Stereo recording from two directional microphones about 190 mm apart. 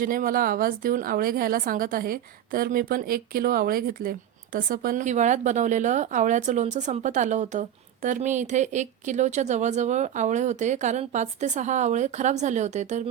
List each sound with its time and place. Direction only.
0.0 s a woman's voice: 50° right (ahead or behind)